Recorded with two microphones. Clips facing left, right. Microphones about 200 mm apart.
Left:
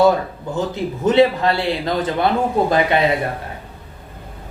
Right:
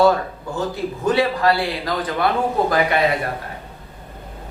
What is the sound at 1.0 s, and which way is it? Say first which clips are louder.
A man's voice: left 4 dB; 20° left (ahead or behind).